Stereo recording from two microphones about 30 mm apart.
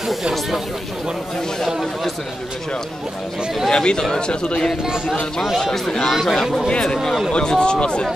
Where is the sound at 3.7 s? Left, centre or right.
Left.